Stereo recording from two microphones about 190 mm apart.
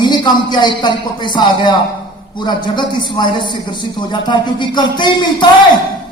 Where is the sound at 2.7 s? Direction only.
25° left (ahead or behind).